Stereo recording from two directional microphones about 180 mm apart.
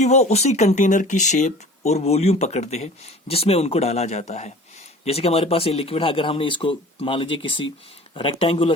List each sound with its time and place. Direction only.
0.0 s speech: 40° left (ahead or behind)